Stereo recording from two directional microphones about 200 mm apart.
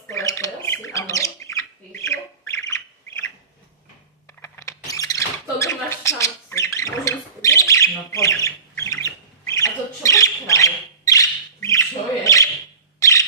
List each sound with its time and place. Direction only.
0.1 s squawk: 15° left (ahead or behind)
4.4 s rodents: 10° left (ahead or behind)
13.0 s bird: 15° left (ahead or behind)